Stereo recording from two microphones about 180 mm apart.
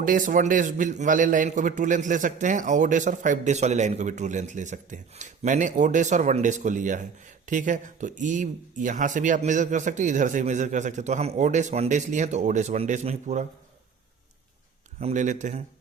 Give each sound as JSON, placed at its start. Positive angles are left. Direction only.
{"t": 0.0, "sound": "a man's voice", "side_deg": -50}
{"t": 15.0, "sound": "a man's voice", "side_deg": -45}